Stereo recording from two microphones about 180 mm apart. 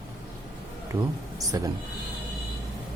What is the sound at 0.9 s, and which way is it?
Speech, 20° right (ahead or behind).